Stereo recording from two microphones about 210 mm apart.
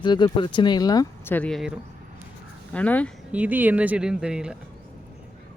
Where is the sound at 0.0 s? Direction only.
20° left (ahead or behind).